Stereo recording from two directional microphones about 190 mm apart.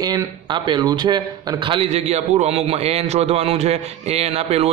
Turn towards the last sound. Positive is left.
turn(degrees=-35)  # may be behind; listen again after turning